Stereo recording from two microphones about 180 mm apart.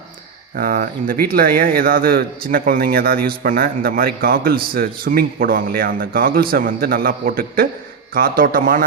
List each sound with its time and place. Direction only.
0.5 s speech: 50° right (ahead or behind)